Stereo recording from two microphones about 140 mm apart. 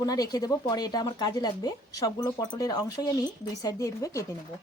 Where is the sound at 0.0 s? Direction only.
25° left (ahead or behind).